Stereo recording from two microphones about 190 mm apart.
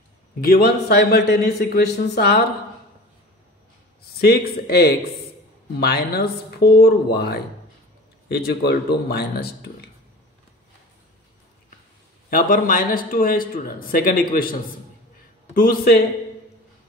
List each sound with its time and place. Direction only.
0.4 s speech: 55° left (ahead or behind)
4.2 s speech: 55° left (ahead or behind)
12.3 s a man's voice: 45° left (ahead or behind)